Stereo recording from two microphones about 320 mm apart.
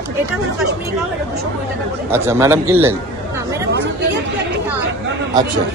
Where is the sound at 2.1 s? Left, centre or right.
Centre.